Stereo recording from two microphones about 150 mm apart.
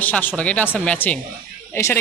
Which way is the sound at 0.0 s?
10° left (ahead or behind).